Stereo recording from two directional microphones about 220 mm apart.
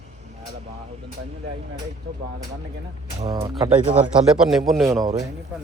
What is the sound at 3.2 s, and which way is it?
Speech, 15° right (ahead or behind).